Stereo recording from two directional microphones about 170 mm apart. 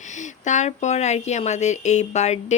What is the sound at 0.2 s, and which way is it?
A woman's voice, 45° left (ahead or behind).